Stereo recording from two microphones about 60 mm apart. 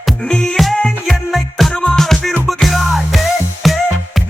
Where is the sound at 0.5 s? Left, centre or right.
Centre.